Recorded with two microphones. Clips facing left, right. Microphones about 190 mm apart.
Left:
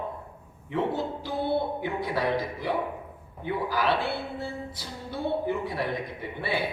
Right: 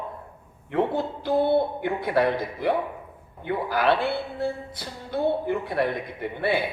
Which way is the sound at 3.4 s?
55° right (ahead or behind).